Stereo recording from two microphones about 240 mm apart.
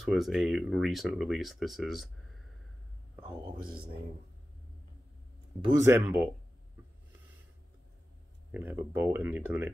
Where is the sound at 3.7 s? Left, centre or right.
Centre.